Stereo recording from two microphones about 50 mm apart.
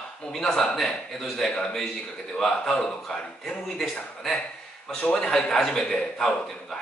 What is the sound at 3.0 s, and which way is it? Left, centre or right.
A man's voice, centre.